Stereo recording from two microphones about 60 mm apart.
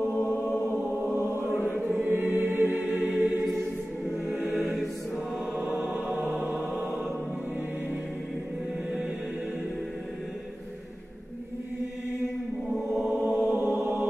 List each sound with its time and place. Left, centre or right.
0.1 s chant: left
2.0 s music: right
4.6 s music: centre
5.6 s music: right
6.4 s chant: right
12.7 s chant: centre
13.2 s mantra: right